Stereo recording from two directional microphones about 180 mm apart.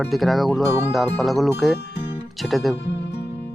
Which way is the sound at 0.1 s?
Centre (ahead or behind).